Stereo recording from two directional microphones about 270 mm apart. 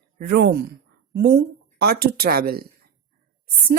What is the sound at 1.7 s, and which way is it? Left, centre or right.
Speech, right.